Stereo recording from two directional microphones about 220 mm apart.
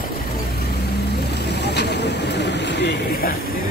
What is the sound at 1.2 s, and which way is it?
Vehicle, 50° left (ahead or behind).